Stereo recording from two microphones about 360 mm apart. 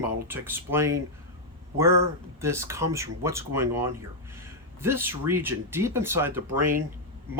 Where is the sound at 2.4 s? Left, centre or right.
Centre.